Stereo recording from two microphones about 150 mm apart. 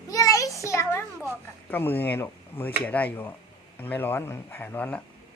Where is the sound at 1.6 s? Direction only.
15° left (ahead or behind).